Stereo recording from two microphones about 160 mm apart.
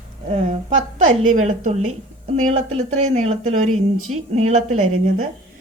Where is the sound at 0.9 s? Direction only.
50° right (ahead or behind).